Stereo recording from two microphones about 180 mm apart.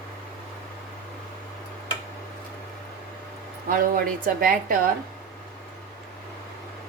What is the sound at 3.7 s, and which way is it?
A woman's voice, 50° right (ahead or behind).